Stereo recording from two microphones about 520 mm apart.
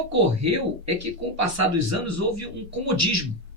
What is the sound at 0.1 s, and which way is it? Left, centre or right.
Speech, right.